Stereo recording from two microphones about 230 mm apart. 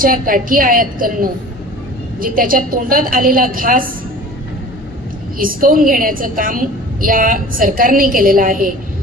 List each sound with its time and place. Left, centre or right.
0.0 s a woman's voice: right
5.4 s a woman's voice: right